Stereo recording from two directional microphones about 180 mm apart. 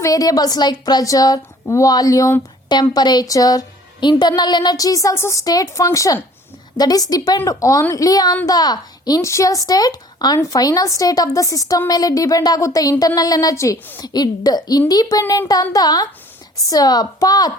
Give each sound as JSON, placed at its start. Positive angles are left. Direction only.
{"t": 0.0, "sound": "speech", "side_deg": 20}